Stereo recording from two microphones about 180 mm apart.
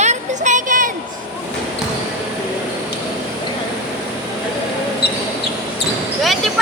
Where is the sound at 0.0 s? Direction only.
40° right (ahead or behind).